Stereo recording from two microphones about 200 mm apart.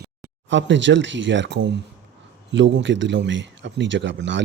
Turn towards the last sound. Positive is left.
turn(degrees=-65)  # may be behind; listen again after turning